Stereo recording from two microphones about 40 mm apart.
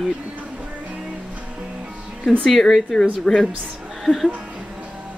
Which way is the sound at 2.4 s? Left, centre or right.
Centre.